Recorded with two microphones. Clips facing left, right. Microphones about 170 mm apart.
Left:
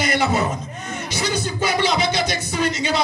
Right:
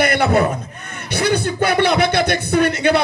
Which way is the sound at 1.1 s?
60° right (ahead or behind).